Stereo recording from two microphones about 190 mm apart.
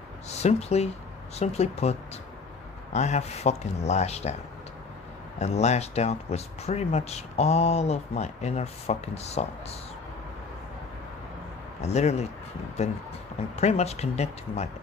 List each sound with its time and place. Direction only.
0.4 s speech: 35° left (ahead or behind)
5.4 s speech: 35° left (ahead or behind)
11.8 s speech: 35° left (ahead or behind)